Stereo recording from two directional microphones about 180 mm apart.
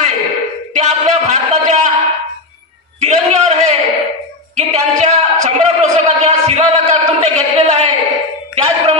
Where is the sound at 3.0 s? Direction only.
40° right (ahead or behind).